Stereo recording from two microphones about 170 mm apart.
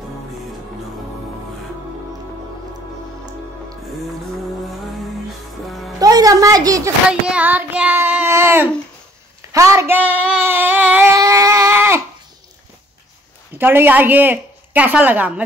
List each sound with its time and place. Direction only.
5.7 s music: centre (ahead or behind)
5.9 s a sound: 20° right (ahead or behind)
7.1 s speech: 5° right (ahead or behind)
9.5 s child singing: 20° right (ahead or behind)
13.6 s speech: 10° right (ahead or behind)